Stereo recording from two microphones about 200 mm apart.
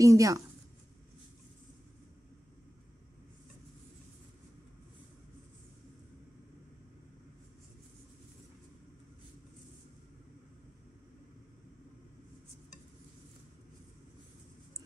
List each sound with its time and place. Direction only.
0.0 s a woman's voice: 15° right (ahead or behind)